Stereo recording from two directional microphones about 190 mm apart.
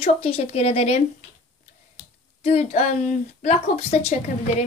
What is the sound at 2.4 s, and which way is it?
A woman's voice, 35° left (ahead or behind).